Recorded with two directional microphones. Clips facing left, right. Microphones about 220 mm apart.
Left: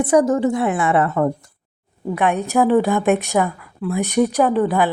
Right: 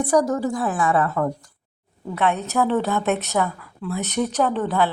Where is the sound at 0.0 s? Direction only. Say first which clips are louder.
Left 4 dB; 20° left (ahead or behind).